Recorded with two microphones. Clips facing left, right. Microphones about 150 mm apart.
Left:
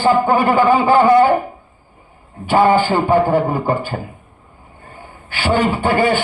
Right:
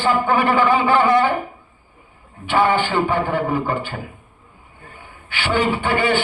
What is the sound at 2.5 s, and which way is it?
A man's voice, 40° left (ahead or behind).